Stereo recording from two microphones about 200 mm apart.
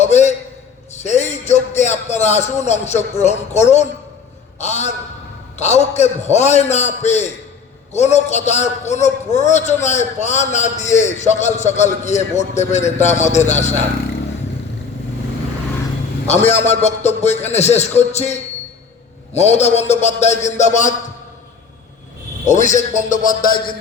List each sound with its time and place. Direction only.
0.0 s a sound: 35° left (ahead or behind)
0.9 s a man's voice: 35° left (ahead or behind)
16.2 s a man's voice: 35° left (ahead or behind)
22.4 s a man's voice: 35° left (ahead or behind)